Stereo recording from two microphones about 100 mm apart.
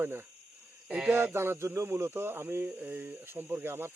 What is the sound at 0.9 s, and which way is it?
Speech, 10° right (ahead or behind).